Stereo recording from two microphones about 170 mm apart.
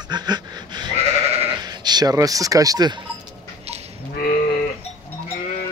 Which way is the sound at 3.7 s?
40° right (ahead or behind).